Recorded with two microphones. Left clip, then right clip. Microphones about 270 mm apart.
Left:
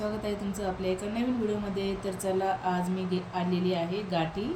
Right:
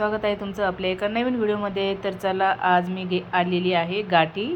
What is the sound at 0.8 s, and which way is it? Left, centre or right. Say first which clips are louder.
Speech: right 8 dB; centre.